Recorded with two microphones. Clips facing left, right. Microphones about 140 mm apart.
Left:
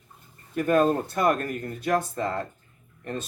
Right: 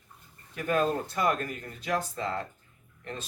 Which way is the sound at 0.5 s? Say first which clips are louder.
Left 6 dB; 45° left (ahead or behind).